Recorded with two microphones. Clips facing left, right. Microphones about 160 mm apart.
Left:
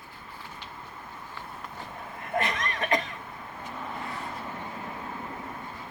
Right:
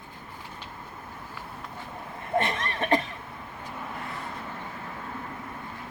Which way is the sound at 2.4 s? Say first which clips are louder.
Right 1 dB; 30° right (ahead or behind).